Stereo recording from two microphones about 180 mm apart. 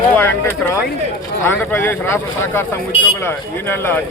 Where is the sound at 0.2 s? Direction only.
10° left (ahead or behind).